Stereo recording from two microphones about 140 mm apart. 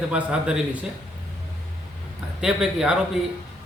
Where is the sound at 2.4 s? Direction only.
5° right (ahead or behind).